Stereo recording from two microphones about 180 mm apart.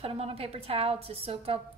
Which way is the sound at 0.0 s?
30° right (ahead or behind).